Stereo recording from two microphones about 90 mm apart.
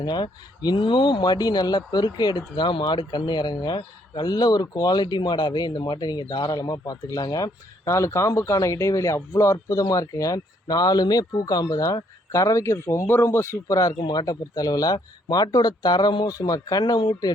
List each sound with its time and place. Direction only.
0.0 s speech: 50° left (ahead or behind)
14.0 s speech: 50° left (ahead or behind)